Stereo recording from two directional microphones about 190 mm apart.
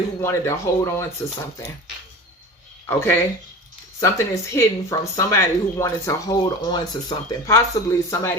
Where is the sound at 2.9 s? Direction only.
10° left (ahead or behind).